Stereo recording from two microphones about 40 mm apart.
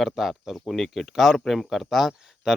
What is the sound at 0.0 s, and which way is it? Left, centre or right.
Speech, centre.